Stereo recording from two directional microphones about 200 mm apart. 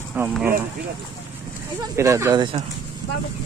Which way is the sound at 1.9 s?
15° right (ahead or behind).